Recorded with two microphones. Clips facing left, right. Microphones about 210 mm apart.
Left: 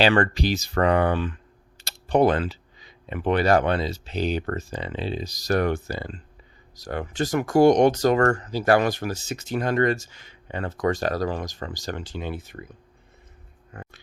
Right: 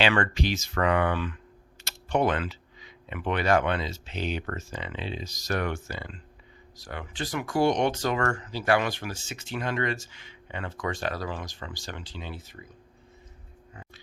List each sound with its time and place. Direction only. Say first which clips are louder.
0.0 s speech: left 5 dB; 35° left (ahead or behind); by 12.6 s 55° left (ahead or behind)